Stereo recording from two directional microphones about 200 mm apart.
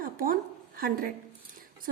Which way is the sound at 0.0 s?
45° right (ahead or behind).